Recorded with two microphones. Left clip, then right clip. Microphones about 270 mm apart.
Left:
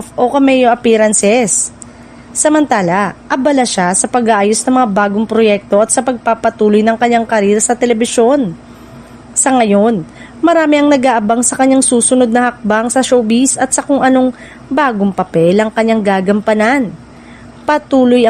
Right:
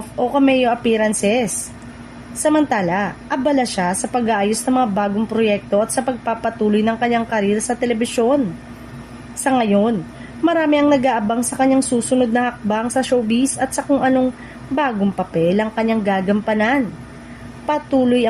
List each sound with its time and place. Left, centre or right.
0.2 s a woman's voice: left
9.4 s a woman's voice: left